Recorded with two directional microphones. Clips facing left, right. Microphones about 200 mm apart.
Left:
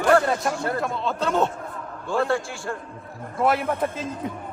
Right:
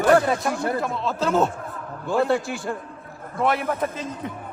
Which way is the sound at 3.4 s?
Centre (ahead or behind).